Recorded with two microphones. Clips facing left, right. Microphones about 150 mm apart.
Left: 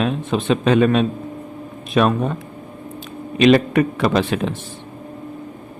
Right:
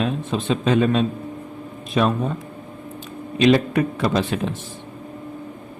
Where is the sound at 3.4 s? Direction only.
75° left (ahead or behind).